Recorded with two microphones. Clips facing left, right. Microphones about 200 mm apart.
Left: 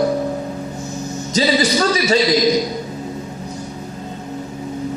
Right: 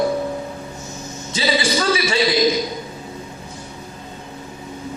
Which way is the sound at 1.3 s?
40° left (ahead or behind).